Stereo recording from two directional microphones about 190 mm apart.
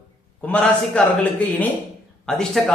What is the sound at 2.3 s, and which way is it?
Speech, 5° left (ahead or behind).